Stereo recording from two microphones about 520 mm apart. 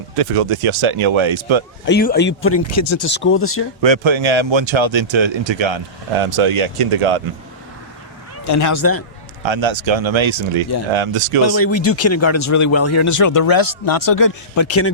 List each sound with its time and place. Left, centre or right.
0.2 s speech: right
1.9 s speech: centre
3.8 s speech: right
8.4 s speech: left
9.4 s speech: right
11.4 s speech: left